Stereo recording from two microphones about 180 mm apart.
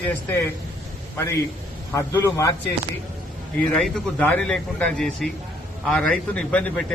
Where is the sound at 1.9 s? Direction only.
15° left (ahead or behind).